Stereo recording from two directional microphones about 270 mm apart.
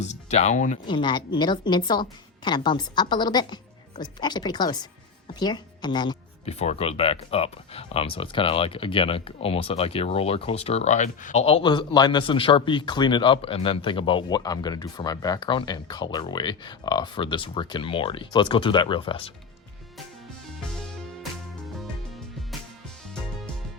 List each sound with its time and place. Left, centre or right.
0.0 s speech: left